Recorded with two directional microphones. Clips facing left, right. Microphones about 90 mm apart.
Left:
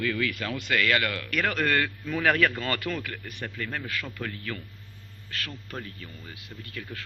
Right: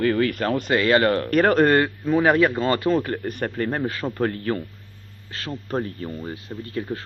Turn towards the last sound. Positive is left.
turn(degrees=-30)  # may be behind; listen again after turning